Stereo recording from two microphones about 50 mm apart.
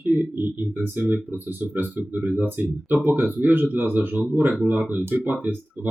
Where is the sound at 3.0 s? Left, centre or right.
Right.